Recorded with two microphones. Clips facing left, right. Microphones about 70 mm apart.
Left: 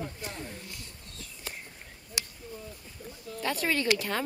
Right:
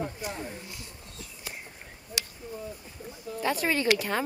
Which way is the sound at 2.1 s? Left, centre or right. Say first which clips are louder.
Right 2 dB; centre.